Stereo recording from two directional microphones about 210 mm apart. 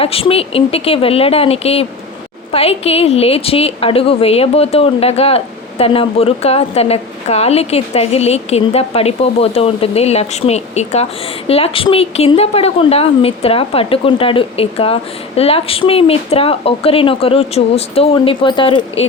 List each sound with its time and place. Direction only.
0.0 s a woman's voice: 25° left (ahead or behind)